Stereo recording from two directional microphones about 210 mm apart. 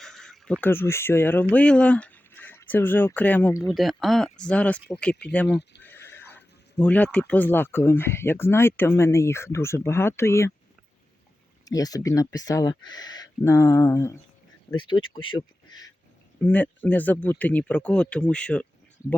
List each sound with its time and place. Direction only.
0.0 s speech: centre (ahead or behind)
3.7 s speech: centre (ahead or behind)
11.6 s speech: 15° left (ahead or behind)
16.4 s speech: 10° left (ahead or behind)